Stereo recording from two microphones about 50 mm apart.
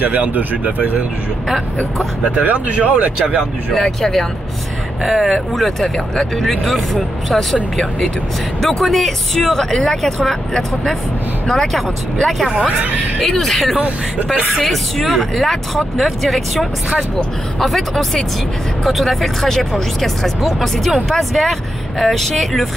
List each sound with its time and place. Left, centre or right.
0.0 s speech: right
2.3 s speech: right
3.7 s speech: centre
7.7 s speech: centre
12.7 s speech: right
13.2 s speech: centre